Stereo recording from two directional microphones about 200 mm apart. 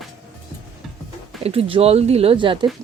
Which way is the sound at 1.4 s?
30° right (ahead or behind).